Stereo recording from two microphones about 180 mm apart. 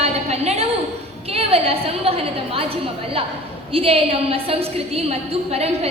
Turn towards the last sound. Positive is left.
turn(degrees=-35)  # may be behind; listen again after turning